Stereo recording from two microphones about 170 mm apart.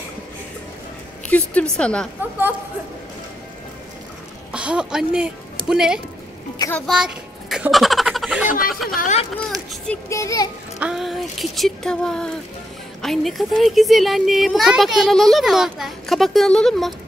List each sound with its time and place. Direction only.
1.3 s a woman's voice: 5° left (ahead or behind)
4.5 s speech: 5° right (ahead or behind)
6.9 s a sound: centre (ahead or behind)
8.9 s speech: 50° left (ahead or behind)
9.4 s a woman's voice: 5° left (ahead or behind)
10.0 s a child's voice: 20° left (ahead or behind)
10.8 s speech: centre (ahead or behind)